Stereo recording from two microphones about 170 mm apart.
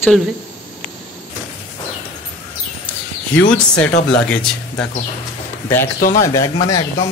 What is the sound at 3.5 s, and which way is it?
Speech, 5° left (ahead or behind).